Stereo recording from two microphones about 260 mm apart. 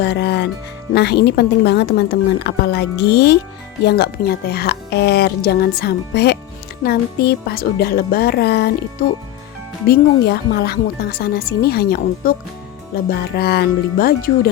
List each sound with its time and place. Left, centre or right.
0.0 s speech: left
9.8 s speech: left